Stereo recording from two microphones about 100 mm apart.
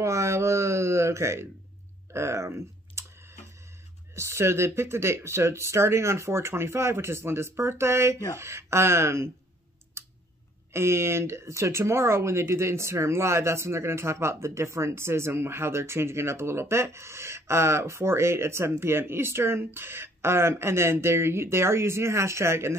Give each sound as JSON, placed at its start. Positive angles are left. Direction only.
{"t": 0.0, "sound": "speech", "side_deg": -30}
{"t": 4.1, "sound": "speech", "side_deg": -30}
{"t": 10.7, "sound": "speech", "side_deg": -25}